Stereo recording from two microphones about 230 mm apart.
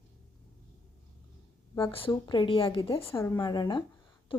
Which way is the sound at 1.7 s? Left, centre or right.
Left.